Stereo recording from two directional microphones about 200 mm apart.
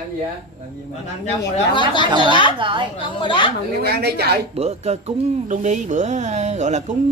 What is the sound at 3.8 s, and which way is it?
Speech, 55° right (ahead or behind).